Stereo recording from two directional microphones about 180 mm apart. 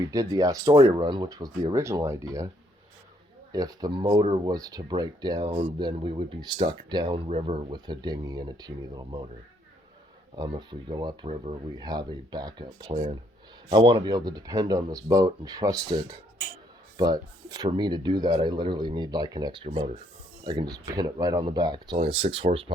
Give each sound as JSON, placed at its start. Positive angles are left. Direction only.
{"t": 0.0, "sound": "speech", "side_deg": -20}
{"t": 3.5, "sound": "speech", "side_deg": -20}
{"t": 10.3, "sound": "speech", "side_deg": -25}
{"t": 21.9, "sound": "speech", "side_deg": -35}